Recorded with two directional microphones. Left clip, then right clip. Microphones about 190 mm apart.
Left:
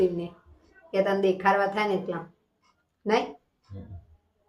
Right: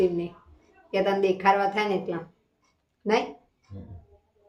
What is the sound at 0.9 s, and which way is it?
A woman's voice, 15° right (ahead or behind).